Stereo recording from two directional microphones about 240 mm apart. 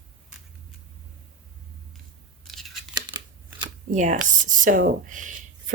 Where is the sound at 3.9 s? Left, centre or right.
Right.